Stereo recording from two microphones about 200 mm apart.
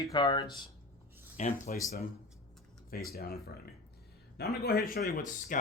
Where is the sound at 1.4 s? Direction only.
40° left (ahead or behind).